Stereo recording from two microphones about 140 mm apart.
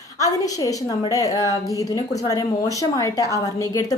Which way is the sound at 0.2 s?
25° left (ahead or behind).